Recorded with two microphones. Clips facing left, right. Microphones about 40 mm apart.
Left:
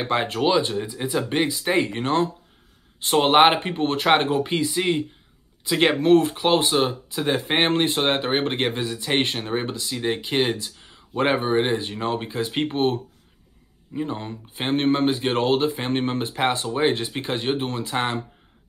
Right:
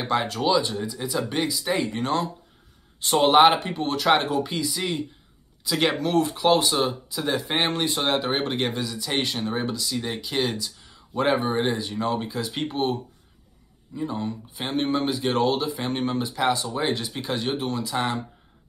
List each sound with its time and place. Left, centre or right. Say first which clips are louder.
0.0 s speech: left 2 dB; left